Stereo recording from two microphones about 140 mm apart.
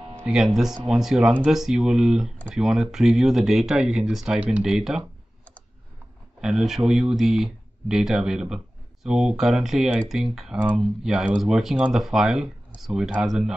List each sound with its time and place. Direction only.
0.3 s speech: 5° right (ahead or behind)
6.4 s speech: 5° right (ahead or behind)